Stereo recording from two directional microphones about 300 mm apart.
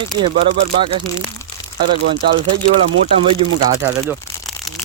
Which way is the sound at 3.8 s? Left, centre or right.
Centre.